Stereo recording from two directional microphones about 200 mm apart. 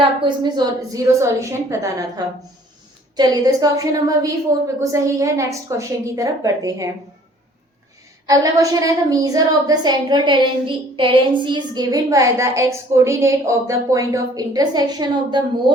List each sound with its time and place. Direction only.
0.0 s a woman's voice: 25° right (ahead or behind)
8.3 s a woman's voice: 15° right (ahead or behind)